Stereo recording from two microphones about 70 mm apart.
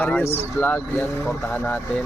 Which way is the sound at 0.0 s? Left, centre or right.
Left.